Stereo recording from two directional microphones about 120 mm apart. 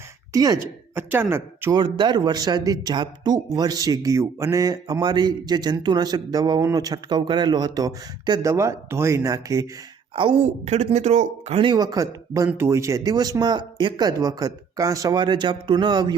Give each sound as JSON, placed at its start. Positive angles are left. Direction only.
{"t": 0.3, "sound": "speech", "side_deg": -30}
{"t": 0.9, "sound": "speech", "side_deg": -20}
{"t": 1.7, "sound": "speech", "side_deg": -40}
{"t": 10.2, "sound": "a woman's voice", "side_deg": -50}
{"t": 10.8, "sound": "speech", "side_deg": -70}
{"t": 11.6, "sound": "speech", "side_deg": -35}